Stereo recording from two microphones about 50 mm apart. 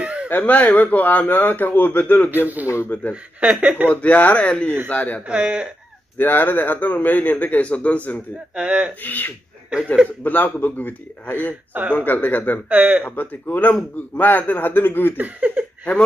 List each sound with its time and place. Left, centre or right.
0.0 s a sound: right
0.3 s a man's voice: left
2.3 s speech: right
2.6 s speech: left
2.9 s speech: left
3.3 s speech: right
3.9 s speech: left
5.3 s speech: centre
6.1 s a man's voice: left
8.5 s speech: centre
9.0 s a man's voice: left
12.6 s speech: right
13.0 s a man's voice: left
15.1 s speech: right